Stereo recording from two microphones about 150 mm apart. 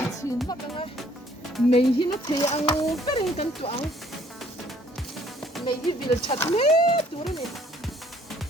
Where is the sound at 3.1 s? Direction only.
40° left (ahead or behind).